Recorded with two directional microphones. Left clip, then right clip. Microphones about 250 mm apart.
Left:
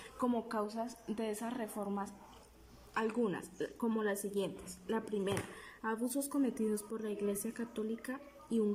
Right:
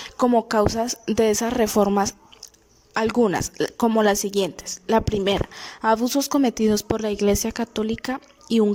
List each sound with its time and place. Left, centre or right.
0.0 s speech: right